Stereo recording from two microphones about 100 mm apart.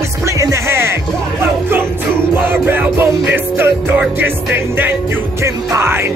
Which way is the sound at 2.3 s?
20° right (ahead or behind).